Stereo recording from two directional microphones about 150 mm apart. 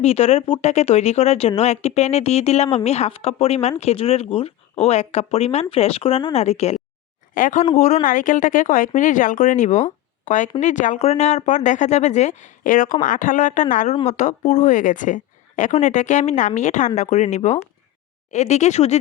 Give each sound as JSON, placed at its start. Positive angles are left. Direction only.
{"t": 0.0, "sound": "speech", "side_deg": 45}
{"t": 7.3, "sound": "speech", "side_deg": 60}